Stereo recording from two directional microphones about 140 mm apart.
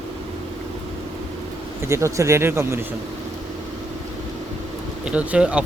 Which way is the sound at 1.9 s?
20° right (ahead or behind).